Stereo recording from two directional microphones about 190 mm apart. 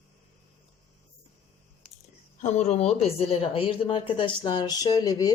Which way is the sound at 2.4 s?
35° left (ahead or behind).